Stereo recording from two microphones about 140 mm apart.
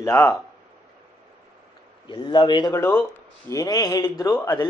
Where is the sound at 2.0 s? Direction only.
35° left (ahead or behind).